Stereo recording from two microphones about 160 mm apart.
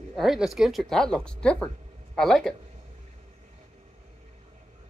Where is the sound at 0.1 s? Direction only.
Centre (ahead or behind).